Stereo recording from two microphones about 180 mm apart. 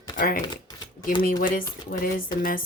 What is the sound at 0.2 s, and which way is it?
Speech, 50° left (ahead or behind).